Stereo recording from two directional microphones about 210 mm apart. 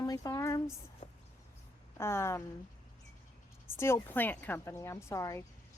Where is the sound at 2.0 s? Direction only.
10° left (ahead or behind).